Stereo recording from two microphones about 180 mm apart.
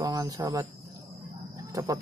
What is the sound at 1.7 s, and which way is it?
Speech, 20° right (ahead or behind).